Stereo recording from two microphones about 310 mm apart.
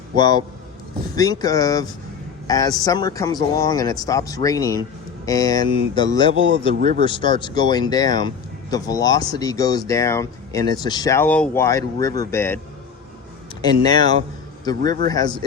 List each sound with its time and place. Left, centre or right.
0.2 s speech: centre
6.3 s speech: right
7.0 s speech: centre
13.6 s speech: centre